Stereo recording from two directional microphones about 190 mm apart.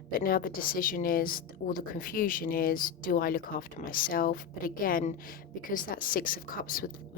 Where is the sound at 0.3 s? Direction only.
50° left (ahead or behind).